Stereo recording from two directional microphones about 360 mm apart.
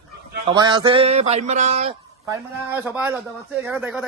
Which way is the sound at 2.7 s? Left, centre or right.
Centre.